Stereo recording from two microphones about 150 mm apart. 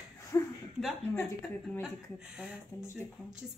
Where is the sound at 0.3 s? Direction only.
20° left (ahead or behind).